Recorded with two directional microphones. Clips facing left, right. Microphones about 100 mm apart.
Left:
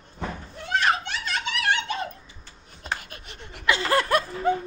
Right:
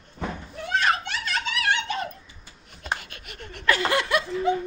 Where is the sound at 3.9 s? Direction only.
45° left (ahead or behind).